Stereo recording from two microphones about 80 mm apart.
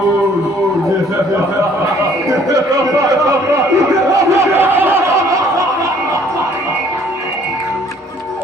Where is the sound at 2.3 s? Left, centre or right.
Right.